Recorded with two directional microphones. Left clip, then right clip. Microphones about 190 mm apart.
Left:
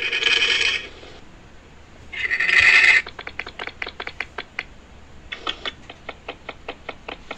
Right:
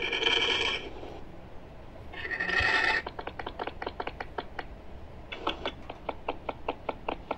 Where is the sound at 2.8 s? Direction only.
25° left (ahead or behind).